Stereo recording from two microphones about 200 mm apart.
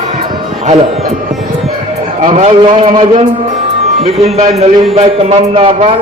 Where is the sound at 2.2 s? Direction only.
35° right (ahead or behind).